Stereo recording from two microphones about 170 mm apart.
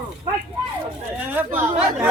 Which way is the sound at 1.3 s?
10° right (ahead or behind).